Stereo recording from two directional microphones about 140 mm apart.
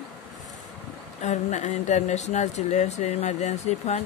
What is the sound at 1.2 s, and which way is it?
Speech, 55° left (ahead or behind).